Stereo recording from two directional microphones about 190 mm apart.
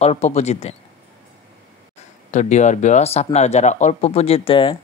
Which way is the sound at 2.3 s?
40° left (ahead or behind).